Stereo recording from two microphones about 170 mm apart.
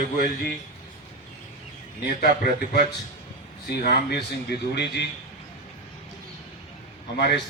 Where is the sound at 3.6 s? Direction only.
75° left (ahead or behind).